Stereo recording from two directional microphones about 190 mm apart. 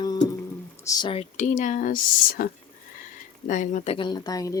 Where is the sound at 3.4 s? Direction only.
40° left (ahead or behind); by 4.5 s 20° left (ahead or behind).